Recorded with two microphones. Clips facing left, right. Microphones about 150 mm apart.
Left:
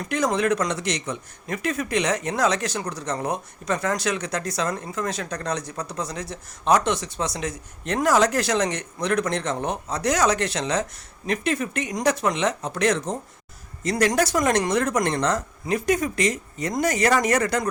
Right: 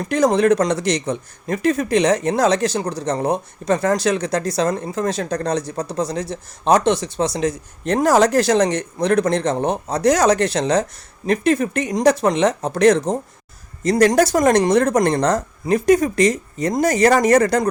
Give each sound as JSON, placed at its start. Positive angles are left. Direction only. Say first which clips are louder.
{"t": 0.0, "sound": "speech", "louder": "right 7 dB", "side_deg": -35}